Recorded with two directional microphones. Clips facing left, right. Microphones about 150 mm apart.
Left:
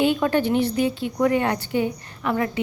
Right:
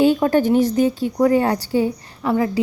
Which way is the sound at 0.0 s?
40° right (ahead or behind).